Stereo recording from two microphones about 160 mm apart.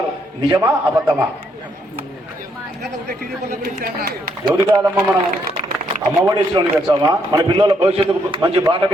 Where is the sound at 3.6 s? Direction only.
75° right (ahead or behind).